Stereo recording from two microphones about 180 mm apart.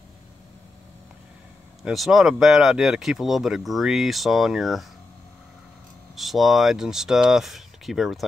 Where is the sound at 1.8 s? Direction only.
Centre (ahead or behind).